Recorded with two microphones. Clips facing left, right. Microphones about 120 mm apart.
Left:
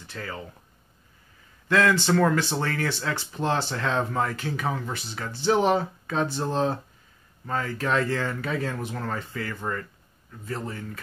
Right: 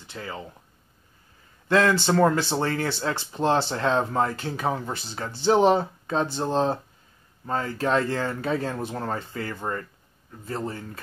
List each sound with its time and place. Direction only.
0.0 s speech: 20° right (ahead or behind)
1.7 s speech: 30° right (ahead or behind)